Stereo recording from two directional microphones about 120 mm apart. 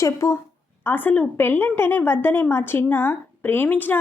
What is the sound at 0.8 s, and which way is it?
A woman's voice, 15° left (ahead or behind).